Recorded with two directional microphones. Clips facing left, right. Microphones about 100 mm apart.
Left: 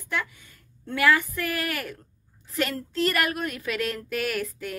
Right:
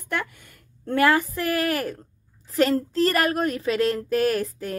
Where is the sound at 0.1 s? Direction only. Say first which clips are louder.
Right 2 dB; 55° right (ahead or behind).